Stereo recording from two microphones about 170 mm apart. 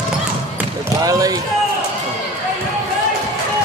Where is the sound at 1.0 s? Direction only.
20° right (ahead or behind).